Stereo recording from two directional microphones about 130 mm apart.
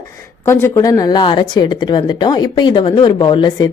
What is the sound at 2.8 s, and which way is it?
Speech, 50° left (ahead or behind).